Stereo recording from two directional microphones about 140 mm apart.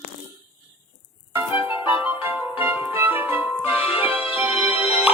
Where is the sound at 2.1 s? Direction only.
15° right (ahead or behind).